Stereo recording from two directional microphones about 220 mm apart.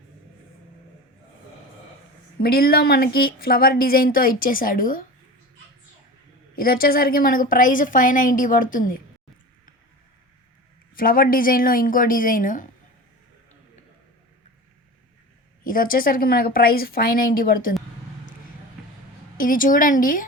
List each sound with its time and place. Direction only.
2.4 s speech: 45° left (ahead or behind)
6.6 s speech: 40° left (ahead or behind)
10.9 s speech: 40° left (ahead or behind)
15.6 s speech: 40° left (ahead or behind)
19.4 s speech: 40° left (ahead or behind)